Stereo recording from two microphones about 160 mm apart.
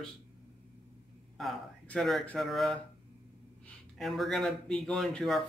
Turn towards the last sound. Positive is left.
turn(degrees=5)  # may be behind; listen again after turning